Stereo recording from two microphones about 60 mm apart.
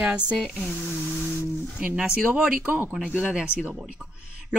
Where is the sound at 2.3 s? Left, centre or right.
Right.